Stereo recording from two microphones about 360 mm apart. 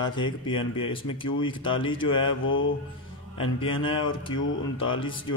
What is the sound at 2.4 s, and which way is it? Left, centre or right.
Mantra, left.